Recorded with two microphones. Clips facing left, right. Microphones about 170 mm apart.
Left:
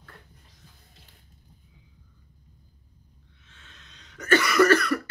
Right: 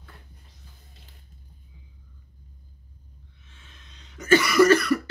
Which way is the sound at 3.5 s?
10° right (ahead or behind).